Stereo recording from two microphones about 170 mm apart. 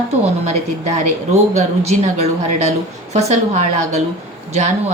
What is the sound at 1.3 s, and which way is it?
A woman's voice, 40° right (ahead or behind).